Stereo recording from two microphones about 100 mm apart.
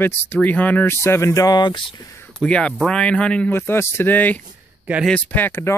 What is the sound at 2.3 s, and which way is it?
Speech, 10° left (ahead or behind).